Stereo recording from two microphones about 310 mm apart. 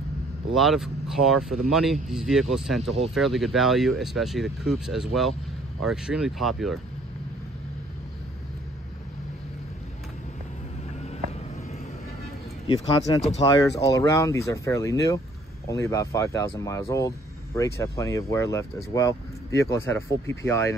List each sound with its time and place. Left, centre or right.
0.6 s speech: centre
12.6 s speech: centre